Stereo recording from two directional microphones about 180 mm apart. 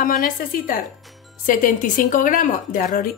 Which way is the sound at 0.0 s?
50° left (ahead or behind).